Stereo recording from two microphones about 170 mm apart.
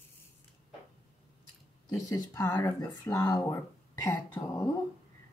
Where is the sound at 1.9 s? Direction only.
20° left (ahead or behind).